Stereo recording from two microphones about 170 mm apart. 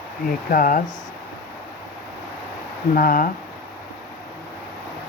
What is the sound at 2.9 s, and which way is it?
Speech, 55° left (ahead or behind).